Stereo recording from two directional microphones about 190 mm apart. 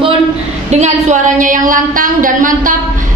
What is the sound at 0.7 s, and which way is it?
A woman's voice, 35° right (ahead or behind).